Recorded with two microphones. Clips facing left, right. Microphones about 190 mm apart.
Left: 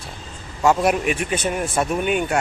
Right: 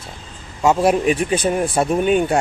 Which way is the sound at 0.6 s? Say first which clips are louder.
Right 3 dB; 30° right (ahead or behind).